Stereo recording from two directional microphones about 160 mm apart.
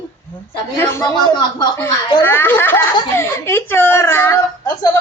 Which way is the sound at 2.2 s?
15° left (ahead or behind).